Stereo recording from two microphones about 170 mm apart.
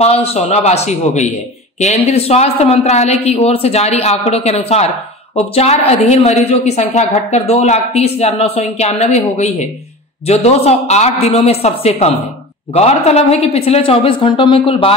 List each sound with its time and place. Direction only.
0.0 s a woman's voice: 35° left (ahead or behind)